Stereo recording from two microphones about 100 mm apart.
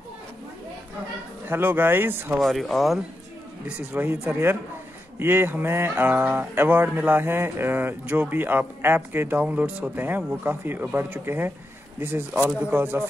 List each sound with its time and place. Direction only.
1.5 s speech: 20° right (ahead or behind)
2.3 s speech: centre (ahead or behind)
3.9 s speech: 20° right (ahead or behind)